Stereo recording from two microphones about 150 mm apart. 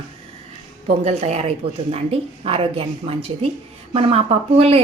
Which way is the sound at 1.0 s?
45° right (ahead or behind).